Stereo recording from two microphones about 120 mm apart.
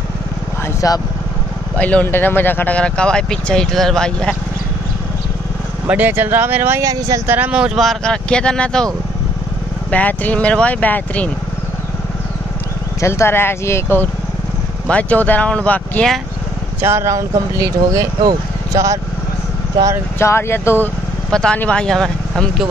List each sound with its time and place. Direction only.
0.7 s speech: 30° left (ahead or behind)
1.8 s speech: 10° left (ahead or behind)
5.9 s speech: 15° right (ahead or behind)
6.8 s speech: 30° right (ahead or behind)
7.2 s speech: 15° right (ahead or behind); by 8.8 s 5° left (ahead or behind)
9.8 s speech: 10° left (ahead or behind)
13.0 s speech: 25° left (ahead or behind)
16.8 s speech: 20° right (ahead or behind)
20.2 s speech: 20° left (ahead or behind)
21.3 s speech: 5° left (ahead or behind)